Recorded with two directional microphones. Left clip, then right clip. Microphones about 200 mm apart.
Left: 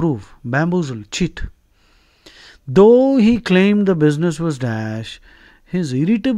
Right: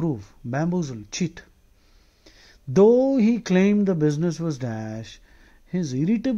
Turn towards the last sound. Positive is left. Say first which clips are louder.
# left 6 dB
turn(degrees=15)  # may be behind; listen again after turning